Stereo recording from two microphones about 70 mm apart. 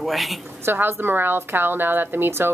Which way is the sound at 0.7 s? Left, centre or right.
Right.